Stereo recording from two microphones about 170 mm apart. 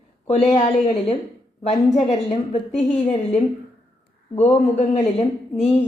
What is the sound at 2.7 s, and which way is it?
Speech, centre (ahead or behind).